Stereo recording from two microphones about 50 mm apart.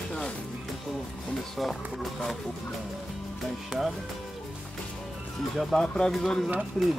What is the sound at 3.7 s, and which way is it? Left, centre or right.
Speech, centre.